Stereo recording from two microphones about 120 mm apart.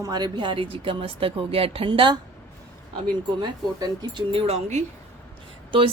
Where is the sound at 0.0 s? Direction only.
35° right (ahead or behind).